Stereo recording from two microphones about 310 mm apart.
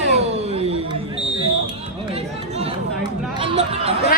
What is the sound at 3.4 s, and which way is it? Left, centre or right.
Speech, centre.